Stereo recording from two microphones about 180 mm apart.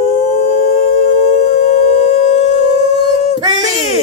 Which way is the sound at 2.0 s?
45° left (ahead or behind).